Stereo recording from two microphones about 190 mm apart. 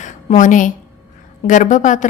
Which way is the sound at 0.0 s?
40° left (ahead or behind).